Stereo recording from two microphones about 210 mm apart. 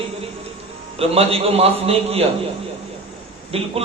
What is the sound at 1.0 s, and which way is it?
Speech, 30° right (ahead or behind).